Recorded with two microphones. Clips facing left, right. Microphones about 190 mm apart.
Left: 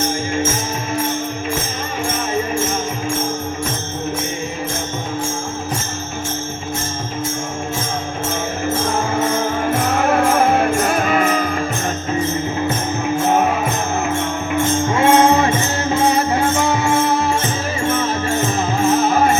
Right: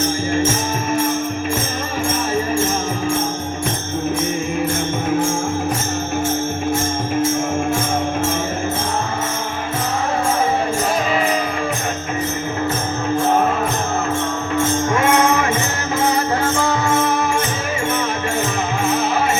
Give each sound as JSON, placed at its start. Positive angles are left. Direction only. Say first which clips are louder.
{"t": 10.0, "sound": "music", "louder": "left 6 dB", "side_deg": 75}
{"t": 11.1, "sound": "music", "louder": "left 2 dB", "side_deg": 50}
{"t": 14.9, "sound": "music", "louder": "left 4 dB", "side_deg": 25}
{"t": 18.8, "sound": "music", "louder": "left 5 dB", "side_deg": 45}